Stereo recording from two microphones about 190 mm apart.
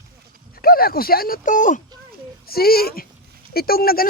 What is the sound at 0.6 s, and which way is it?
Speech, 50° left (ahead or behind).